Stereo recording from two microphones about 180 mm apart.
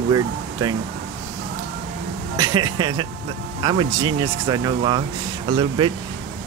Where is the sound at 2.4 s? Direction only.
25° right (ahead or behind).